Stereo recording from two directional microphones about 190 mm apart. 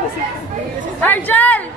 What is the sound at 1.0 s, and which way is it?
Speech, 10° left (ahead or behind).